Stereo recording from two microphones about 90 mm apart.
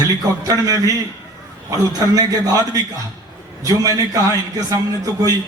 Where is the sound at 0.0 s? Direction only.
40° right (ahead or behind).